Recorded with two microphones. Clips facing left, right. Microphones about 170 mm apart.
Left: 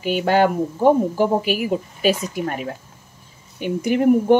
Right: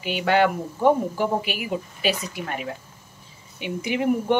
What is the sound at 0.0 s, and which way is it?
Speech, 40° left (ahead or behind).